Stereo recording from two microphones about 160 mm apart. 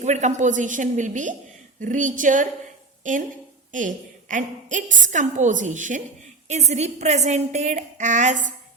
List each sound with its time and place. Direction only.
0.0 s a woman's voice: 45° right (ahead or behind)